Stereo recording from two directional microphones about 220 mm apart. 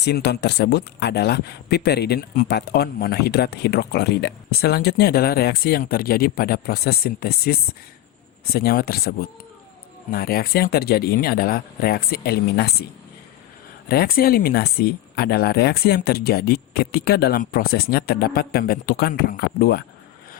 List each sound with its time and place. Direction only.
0.0 s speech: 50° left (ahead or behind)
13.8 s speech: 45° left (ahead or behind)